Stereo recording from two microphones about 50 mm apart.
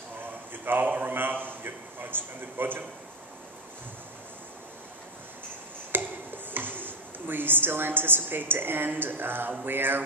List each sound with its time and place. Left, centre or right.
0.5 s a man's voice: right
5.9 s speech: right